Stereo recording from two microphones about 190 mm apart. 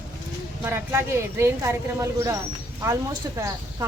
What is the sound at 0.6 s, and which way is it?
Speech, 10° right (ahead or behind).